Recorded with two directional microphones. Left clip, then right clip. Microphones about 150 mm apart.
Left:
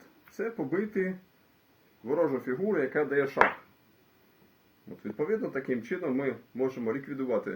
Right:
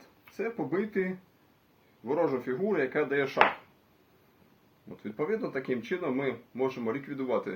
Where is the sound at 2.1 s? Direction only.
10° right (ahead or behind).